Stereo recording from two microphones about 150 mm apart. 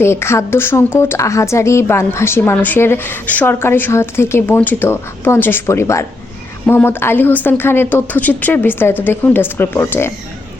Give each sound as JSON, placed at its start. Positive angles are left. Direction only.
{"t": 0.0, "sound": "a woman's voice", "side_deg": 15}